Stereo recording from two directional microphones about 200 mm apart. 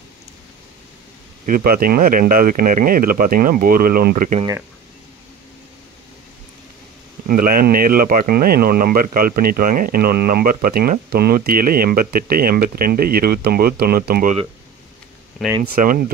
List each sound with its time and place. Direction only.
1.4 s speech: 45° right (ahead or behind)
7.2 s speech: 45° right (ahead or behind)
15.7 s speech: 45° right (ahead or behind)